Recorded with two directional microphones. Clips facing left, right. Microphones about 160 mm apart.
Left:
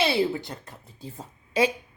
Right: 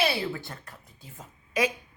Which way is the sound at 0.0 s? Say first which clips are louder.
Left 4 dB; 20° left (ahead or behind).